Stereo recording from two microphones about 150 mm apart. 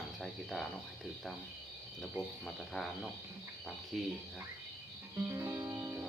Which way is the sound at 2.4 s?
5° left (ahead or behind).